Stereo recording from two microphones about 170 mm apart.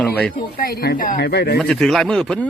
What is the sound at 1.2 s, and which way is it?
Speech, 80° left.